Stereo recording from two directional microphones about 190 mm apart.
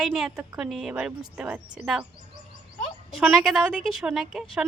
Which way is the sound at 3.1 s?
5° right (ahead or behind).